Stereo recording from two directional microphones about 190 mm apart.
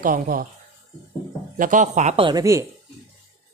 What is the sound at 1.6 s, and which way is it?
Speech, 40° right (ahead or behind).